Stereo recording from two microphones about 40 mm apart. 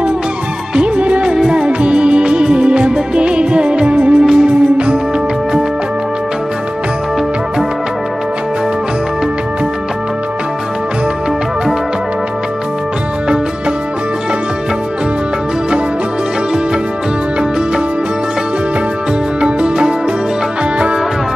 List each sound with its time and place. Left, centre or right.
0.7 s music of bollywood: right
1.3 s music: centre
4.2 s music: centre
4.5 s music: right
19.4 s music: right